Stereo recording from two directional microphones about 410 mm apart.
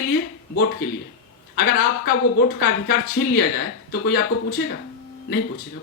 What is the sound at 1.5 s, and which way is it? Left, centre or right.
Speech, left.